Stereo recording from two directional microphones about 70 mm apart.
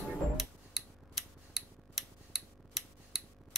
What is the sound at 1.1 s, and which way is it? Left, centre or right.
Scissors, centre.